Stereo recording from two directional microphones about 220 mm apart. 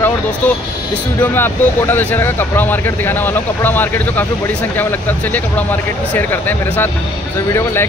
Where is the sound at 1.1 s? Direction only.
10° left (ahead or behind).